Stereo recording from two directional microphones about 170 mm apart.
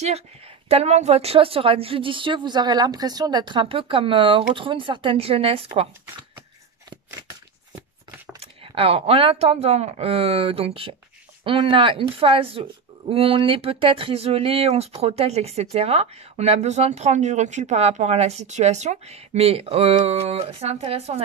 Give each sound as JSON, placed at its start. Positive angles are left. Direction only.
{"t": 0.7, "sound": "speech", "side_deg": -40}
{"t": 8.4, "sound": "speech", "side_deg": -35}